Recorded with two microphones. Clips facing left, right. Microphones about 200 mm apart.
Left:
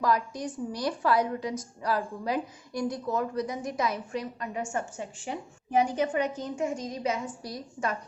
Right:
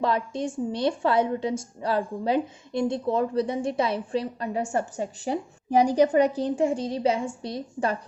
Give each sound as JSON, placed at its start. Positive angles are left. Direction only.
{"t": 0.0, "sound": "a woman's voice", "side_deg": -25}